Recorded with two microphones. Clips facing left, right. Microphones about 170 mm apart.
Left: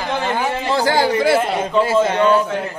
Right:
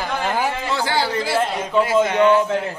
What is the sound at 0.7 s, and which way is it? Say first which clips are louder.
Speech: left 7 dB; 45° left (ahead or behind).